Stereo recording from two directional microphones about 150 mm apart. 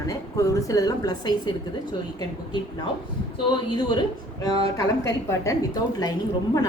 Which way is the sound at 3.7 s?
30° left (ahead or behind).